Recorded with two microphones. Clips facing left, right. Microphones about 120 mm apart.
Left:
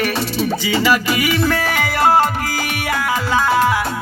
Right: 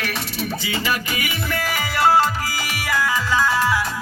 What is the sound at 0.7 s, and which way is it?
Music, 90° left.